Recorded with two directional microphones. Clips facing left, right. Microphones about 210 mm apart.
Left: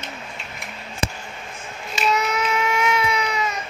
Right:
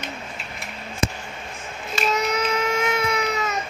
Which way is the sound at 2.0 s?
40° right (ahead or behind).